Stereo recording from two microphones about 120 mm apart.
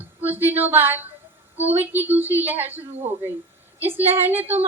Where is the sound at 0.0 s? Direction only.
15° right (ahead or behind).